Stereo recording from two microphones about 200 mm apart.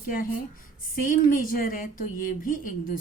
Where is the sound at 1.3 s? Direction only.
45° left (ahead or behind).